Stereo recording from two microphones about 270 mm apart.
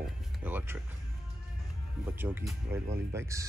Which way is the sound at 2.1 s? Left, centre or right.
Centre.